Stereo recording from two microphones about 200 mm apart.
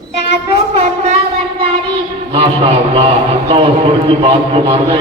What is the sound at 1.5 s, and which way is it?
A man's voice, 25° right (ahead or behind).